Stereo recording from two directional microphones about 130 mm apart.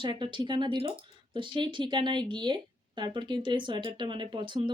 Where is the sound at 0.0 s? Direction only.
40° right (ahead or behind).